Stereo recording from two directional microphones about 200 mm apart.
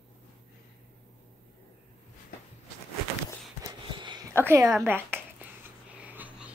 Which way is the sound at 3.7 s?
20° right (ahead or behind).